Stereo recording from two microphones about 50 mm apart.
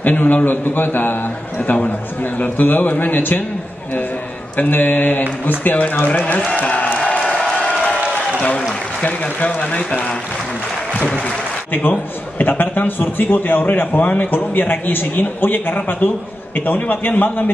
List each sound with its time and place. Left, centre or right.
0.0 s a man's voice: left
4.6 s a man's voice: left
7.2 s applause: left
9.0 s speech: left
11.7 s a man's voice: left